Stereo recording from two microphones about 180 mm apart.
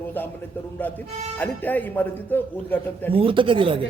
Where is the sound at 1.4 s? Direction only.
10° left (ahead or behind).